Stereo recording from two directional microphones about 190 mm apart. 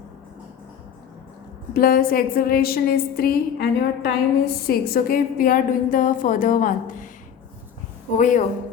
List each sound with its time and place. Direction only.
1.7 s a woman's voice: 50° left (ahead or behind)
8.2 s a woman's voice: 40° left (ahead or behind)